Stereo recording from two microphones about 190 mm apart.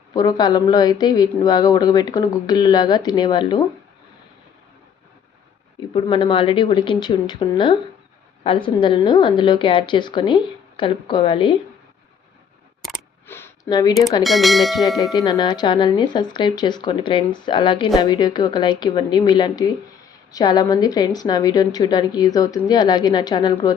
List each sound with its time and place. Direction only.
0.1 s a woman's voice: 20° left (ahead or behind)
5.9 s a woman's voice: 25° left (ahead or behind)
13.2 s a sound: 10° left (ahead or behind)
14.3 s speech: centre (ahead or behind)
15.1 s a woman's voice: 20° left (ahead or behind)